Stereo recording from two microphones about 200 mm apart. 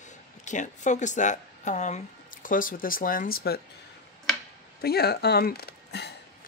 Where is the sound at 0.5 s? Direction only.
40° left (ahead or behind).